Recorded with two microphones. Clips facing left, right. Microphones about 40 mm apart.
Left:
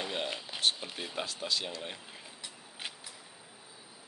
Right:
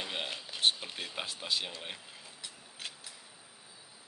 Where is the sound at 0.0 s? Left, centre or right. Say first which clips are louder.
Left 2 dB; centre.